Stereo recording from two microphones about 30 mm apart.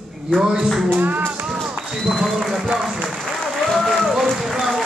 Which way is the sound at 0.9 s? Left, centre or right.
Right.